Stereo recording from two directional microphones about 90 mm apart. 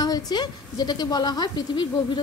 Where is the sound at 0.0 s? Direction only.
50° left (ahead or behind).